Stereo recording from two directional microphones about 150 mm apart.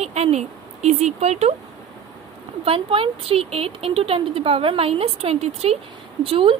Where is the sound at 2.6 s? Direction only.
40° right (ahead or behind).